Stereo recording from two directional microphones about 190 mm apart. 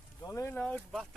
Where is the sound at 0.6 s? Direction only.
5° left (ahead or behind).